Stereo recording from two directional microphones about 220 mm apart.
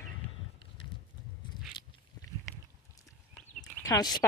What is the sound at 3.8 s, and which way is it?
Speech, 15° left (ahead or behind).